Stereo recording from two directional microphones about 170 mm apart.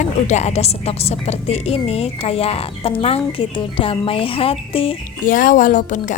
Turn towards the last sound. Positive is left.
turn(degrees=50)  # may be behind; listen again after turning